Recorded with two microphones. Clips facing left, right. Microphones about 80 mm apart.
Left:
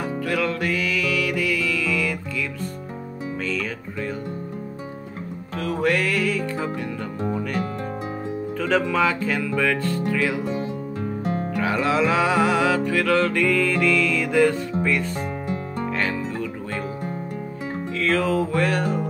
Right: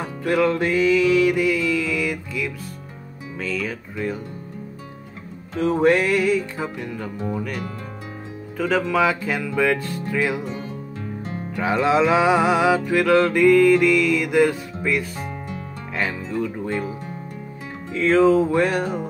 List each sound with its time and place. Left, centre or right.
0.0 s music: right
3.4 s speech: centre
5.6 s music: right
7.2 s speech: centre
8.5 s music: centre
11.5 s music: right
17.9 s music: right